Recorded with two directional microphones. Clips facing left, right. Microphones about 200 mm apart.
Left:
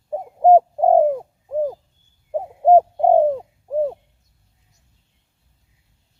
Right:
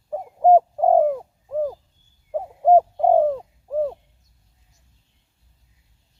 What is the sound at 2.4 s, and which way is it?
Bird, 20° left (ahead or behind).